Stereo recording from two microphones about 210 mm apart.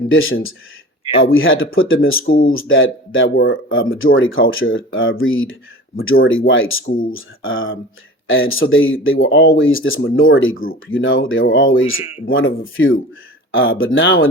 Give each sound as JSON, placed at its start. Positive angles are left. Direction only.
{"t": 0.1, "sound": "speech", "side_deg": 70}
{"t": 6.8, "sound": "speech", "side_deg": 40}
{"t": 7.1, "sound": "speech", "side_deg": 70}